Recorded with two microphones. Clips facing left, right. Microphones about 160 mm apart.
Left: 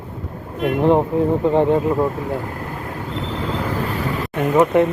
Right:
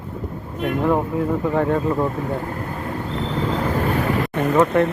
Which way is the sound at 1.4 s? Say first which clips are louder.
Left 3 dB; 20° left (ahead or behind).